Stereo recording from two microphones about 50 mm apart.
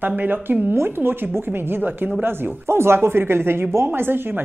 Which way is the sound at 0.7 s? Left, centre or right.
Right.